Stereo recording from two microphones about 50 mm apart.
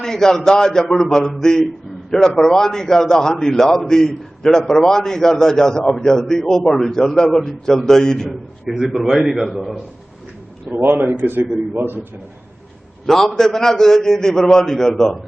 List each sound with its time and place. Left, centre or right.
0.0 s a man's voice: centre
10.7 s a man's voice: right
13.1 s a man's voice: centre